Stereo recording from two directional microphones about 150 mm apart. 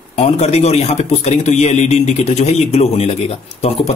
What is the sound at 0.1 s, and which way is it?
A man's voice, 45° left (ahead or behind).